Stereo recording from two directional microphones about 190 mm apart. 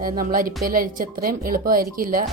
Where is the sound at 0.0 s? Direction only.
50° right (ahead or behind).